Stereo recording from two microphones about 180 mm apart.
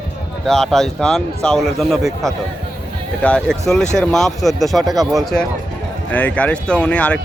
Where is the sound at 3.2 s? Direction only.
5° left (ahead or behind).